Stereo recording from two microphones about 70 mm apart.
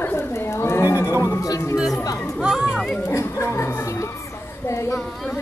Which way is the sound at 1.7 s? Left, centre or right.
Centre.